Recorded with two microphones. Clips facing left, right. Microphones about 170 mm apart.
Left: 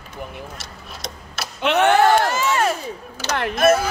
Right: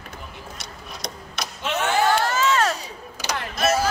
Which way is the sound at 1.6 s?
65° left (ahead or behind).